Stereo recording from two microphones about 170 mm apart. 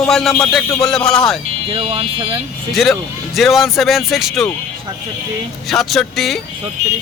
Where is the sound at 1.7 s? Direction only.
30° right (ahead or behind).